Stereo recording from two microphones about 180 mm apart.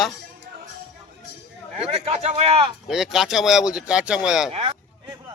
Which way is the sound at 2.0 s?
35° right (ahead or behind).